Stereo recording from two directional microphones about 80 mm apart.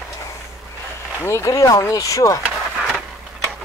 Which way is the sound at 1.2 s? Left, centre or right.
Left.